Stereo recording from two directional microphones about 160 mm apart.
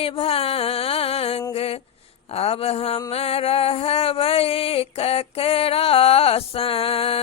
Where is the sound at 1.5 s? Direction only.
35° left (ahead or behind).